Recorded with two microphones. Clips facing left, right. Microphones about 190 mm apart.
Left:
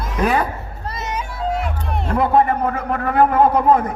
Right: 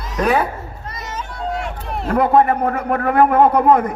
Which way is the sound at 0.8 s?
25° left (ahead or behind).